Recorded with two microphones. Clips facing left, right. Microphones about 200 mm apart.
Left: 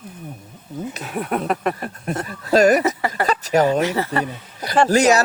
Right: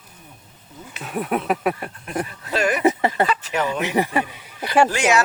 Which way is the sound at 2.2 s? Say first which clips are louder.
Left 9 dB; 40° left (ahead or behind).